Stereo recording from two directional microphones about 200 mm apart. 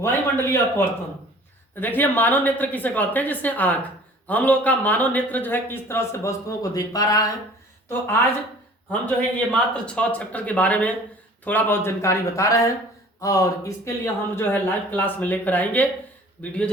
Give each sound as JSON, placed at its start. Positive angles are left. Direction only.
{"t": 0.0, "sound": "a man's voice", "side_deg": 10}